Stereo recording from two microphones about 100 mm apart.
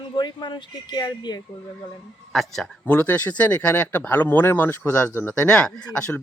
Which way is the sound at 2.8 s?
15° left (ahead or behind).